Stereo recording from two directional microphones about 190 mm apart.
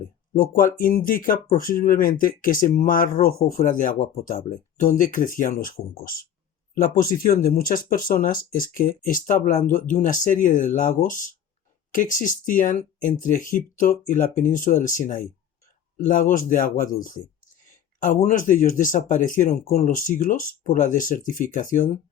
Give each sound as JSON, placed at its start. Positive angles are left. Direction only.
{"t": 0.3, "sound": "speech", "side_deg": 45}